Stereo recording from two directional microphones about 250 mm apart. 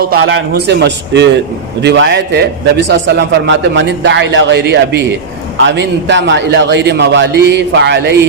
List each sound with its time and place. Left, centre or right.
0.0 s a man's voice: right